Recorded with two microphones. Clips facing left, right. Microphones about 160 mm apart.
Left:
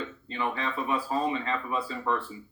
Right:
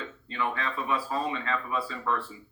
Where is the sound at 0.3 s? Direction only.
25° left (ahead or behind).